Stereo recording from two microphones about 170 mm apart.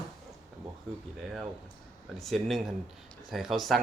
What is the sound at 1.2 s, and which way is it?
Speech, centre (ahead or behind).